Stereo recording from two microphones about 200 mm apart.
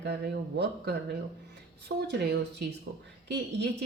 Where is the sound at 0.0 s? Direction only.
55° right (ahead or behind).